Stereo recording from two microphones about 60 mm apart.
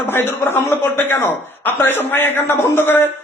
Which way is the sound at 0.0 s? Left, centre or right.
Left.